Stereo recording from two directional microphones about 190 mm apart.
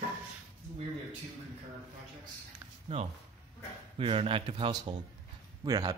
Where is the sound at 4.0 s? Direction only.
30° right (ahead or behind).